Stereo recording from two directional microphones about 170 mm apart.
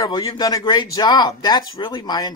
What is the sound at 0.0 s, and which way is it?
Speech, 20° left (ahead or behind).